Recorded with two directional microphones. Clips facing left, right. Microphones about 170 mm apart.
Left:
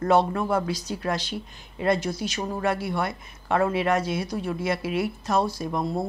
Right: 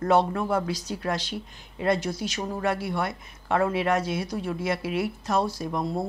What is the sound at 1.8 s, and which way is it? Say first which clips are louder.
Speech: left 1 dB; 15° left (ahead or behind).